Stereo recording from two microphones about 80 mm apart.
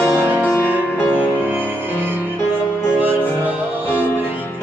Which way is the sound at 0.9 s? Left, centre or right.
Centre.